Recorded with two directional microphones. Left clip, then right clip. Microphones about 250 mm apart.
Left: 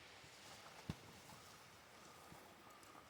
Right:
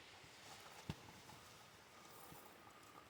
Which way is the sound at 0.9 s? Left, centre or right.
Right.